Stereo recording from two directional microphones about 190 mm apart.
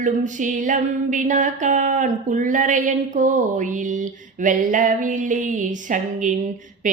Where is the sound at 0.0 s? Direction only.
40° right (ahead or behind).